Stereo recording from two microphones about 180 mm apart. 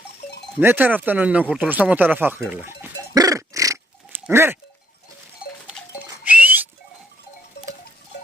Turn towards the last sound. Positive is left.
turn(degrees=70)  # may be behind; listen again after turning